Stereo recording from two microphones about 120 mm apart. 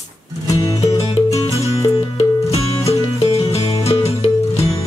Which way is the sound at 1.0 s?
50° left (ahead or behind).